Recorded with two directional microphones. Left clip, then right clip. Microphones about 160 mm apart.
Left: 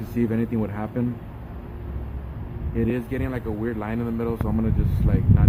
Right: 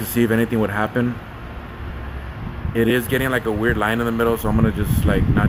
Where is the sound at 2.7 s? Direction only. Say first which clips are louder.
Right 8 dB; 15° right (ahead or behind).